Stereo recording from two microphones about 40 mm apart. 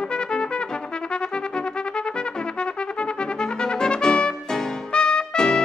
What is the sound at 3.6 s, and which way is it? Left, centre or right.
Trumpet, left.